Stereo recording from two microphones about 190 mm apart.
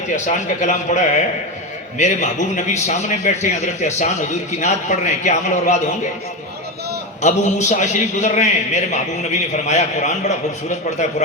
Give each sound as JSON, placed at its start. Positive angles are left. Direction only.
{"t": 0.3, "sound": "a man's voice", "side_deg": 40}
{"t": 7.2, "sound": "a man's voice", "side_deg": 40}